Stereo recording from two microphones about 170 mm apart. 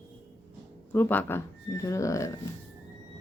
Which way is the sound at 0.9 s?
10° left (ahead or behind).